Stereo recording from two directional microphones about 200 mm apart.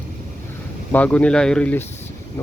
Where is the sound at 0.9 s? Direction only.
5° left (ahead or behind).